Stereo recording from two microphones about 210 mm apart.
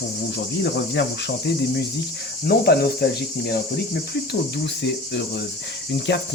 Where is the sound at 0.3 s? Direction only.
55° left (ahead or behind).